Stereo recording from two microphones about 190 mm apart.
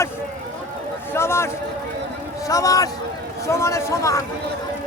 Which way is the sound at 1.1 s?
15° left (ahead or behind).